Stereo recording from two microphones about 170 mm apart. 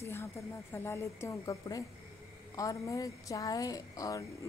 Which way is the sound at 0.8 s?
15° left (ahead or behind).